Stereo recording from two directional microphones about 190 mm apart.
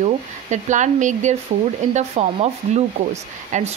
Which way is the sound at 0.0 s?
40° right (ahead or behind).